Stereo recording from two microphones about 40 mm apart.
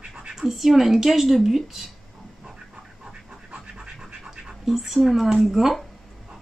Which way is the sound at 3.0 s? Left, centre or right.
Right.